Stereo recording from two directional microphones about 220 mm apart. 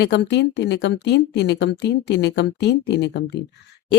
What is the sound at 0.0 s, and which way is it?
Speech, 50° left (ahead or behind).